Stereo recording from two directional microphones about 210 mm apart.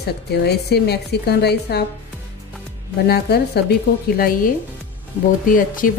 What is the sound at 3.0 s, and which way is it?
Speech, 50° left (ahead or behind).